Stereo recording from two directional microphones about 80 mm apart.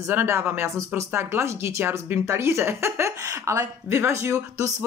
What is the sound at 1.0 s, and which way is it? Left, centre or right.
Speech, right.